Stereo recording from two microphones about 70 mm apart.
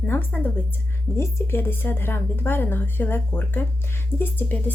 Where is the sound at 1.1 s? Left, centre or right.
Left.